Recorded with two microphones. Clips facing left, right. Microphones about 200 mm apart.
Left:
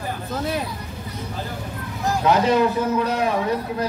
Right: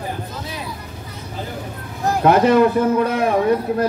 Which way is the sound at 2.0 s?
55° right (ahead or behind).